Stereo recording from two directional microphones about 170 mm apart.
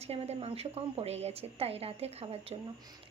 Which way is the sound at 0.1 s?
35° right (ahead or behind).